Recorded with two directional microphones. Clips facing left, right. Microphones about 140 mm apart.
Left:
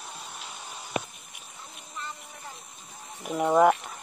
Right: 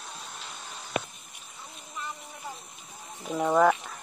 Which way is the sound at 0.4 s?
15° left (ahead or behind).